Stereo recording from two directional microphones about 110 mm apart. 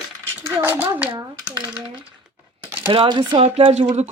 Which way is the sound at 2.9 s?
45° right (ahead or behind).